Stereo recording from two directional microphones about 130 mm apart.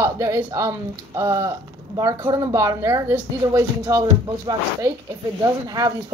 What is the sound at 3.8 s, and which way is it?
A woman's voice, 30° right (ahead or behind).